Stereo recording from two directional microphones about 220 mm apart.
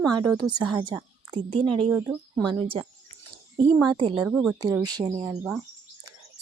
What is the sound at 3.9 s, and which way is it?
Speech, 20° right (ahead or behind).